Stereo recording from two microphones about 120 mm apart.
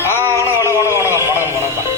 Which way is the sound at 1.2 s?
25° right (ahead or behind).